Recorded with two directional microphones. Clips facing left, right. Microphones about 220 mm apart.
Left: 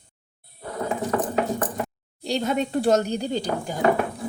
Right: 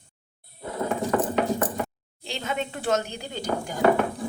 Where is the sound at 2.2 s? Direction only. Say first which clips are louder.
Left 6 dB; 40° left (ahead or behind).